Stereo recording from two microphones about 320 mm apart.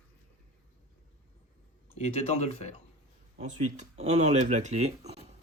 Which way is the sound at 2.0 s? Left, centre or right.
Centre.